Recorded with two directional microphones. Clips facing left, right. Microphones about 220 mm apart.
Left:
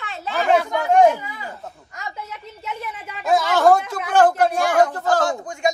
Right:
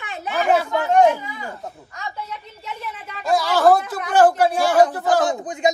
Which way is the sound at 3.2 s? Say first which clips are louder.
Even; centre (ahead or behind).